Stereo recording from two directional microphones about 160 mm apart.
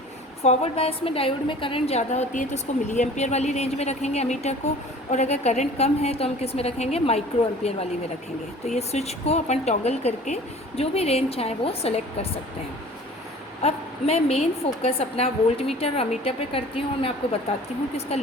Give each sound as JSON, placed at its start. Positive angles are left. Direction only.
{"t": 0.4, "sound": "a woman's voice", "side_deg": 40}
{"t": 13.6, "sound": "a woman's voice", "side_deg": 40}
{"t": 18.1, "sound": "a woman's voice", "side_deg": 40}